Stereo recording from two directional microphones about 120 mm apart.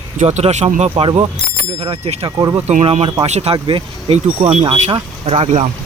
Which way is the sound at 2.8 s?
55° right (ahead or behind).